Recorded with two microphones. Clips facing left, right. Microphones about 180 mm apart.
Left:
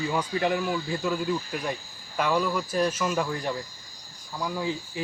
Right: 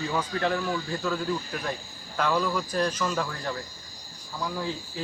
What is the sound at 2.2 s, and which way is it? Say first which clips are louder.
Speech: left 1 dB; 10° left (ahead or behind).